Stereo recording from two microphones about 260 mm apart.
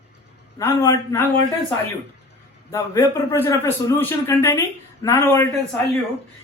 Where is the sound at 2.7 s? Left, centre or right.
Centre.